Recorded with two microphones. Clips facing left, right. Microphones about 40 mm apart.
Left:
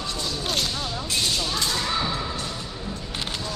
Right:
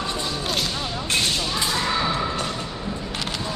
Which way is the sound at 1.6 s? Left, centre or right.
Centre.